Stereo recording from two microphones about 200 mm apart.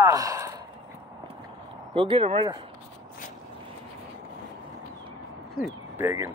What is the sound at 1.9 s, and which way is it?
Speech, 25° right (ahead or behind).